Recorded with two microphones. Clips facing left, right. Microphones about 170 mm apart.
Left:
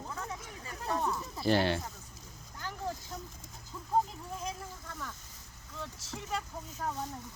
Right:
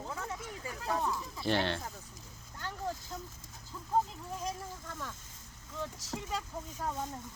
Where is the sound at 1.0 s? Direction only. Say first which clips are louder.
Left 3 dB; 5° left (ahead or behind).